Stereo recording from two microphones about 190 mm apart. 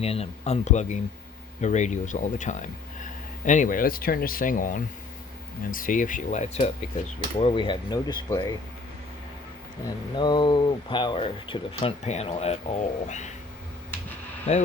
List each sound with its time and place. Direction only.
0.0 s speech: 35° left (ahead or behind)
9.8 s speech: 25° left (ahead or behind)
14.5 s speech: 40° left (ahead or behind)